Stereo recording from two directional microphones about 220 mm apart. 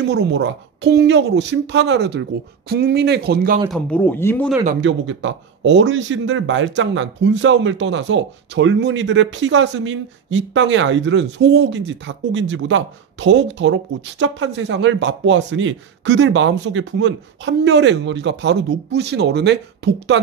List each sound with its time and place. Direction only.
0.1 s speech: 50° right (ahead or behind)
3.7 s speech: 5° left (ahead or behind)
4.8 s speech: 60° right (ahead or behind)